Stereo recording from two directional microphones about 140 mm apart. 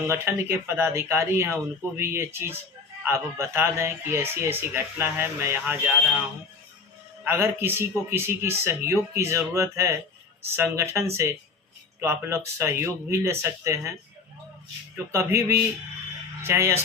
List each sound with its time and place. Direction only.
0.1 s speech: 15° right (ahead or behind)
7.3 s speech: 15° right (ahead or behind)
14.9 s speech: 20° right (ahead or behind)